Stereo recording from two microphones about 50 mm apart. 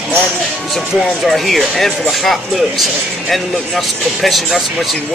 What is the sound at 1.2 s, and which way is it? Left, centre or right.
Speech, centre.